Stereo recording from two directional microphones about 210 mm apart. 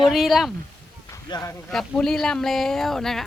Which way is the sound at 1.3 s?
15° left (ahead or behind).